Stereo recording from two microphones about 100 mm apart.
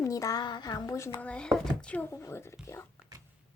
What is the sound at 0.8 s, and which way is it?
Speech, 30° left (ahead or behind).